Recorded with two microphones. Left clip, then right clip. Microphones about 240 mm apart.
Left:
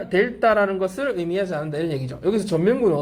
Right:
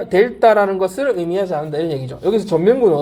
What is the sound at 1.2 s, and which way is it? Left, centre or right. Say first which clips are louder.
Speech: right 5 dB; right.